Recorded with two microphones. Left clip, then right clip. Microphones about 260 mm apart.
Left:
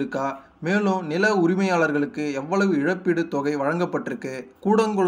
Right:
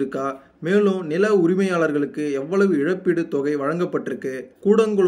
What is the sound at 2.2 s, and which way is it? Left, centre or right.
Speech, left.